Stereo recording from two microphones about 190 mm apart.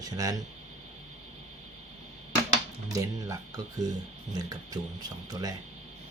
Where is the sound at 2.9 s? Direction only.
20° right (ahead or behind).